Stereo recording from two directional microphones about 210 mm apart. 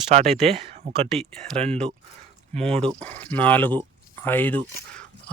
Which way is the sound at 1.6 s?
30° right (ahead or behind).